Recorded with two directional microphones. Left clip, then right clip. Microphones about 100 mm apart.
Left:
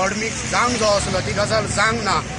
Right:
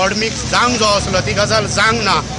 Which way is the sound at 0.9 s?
5° right (ahead or behind).